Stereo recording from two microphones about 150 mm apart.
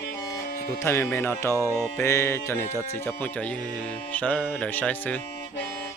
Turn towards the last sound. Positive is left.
turn(degrees=10)  # may be behind; listen again after turning